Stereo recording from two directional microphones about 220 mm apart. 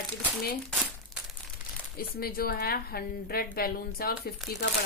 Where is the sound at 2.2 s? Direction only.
45° left (ahead or behind).